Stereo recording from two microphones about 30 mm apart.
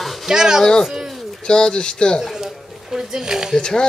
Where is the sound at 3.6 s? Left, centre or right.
Left.